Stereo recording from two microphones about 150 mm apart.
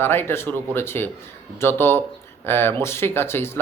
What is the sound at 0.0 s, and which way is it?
A man's voice, 15° left (ahead or behind).